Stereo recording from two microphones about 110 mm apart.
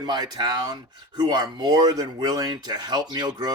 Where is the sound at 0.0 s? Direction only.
40° right (ahead or behind).